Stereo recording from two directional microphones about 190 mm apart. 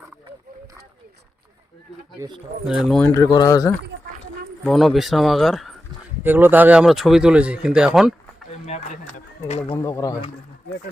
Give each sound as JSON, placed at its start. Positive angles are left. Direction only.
{"t": 2.2, "sound": "speech", "side_deg": -15}
{"t": 2.6, "sound": "speech", "side_deg": 0}
{"t": 3.2, "sound": "speech", "side_deg": 20}
{"t": 4.6, "sound": "speech", "side_deg": 0}
{"t": 6.2, "sound": "speech", "side_deg": -10}
{"t": 8.6, "sound": "a sound", "side_deg": 35}
{"t": 9.7, "sound": "speech", "side_deg": 15}